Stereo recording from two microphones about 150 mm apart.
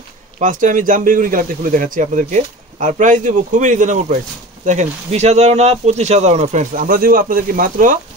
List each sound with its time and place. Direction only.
0.4 s speech: 60° right (ahead or behind)